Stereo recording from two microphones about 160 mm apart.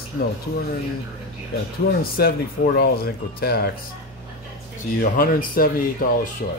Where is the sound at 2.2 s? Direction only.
70° left (ahead or behind).